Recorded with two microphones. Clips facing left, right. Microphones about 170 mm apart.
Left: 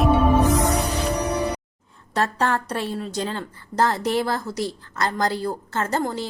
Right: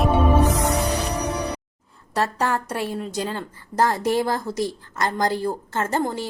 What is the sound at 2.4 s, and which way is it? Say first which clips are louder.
A woman's voice: left 1 dB; 15° right (ahead or behind).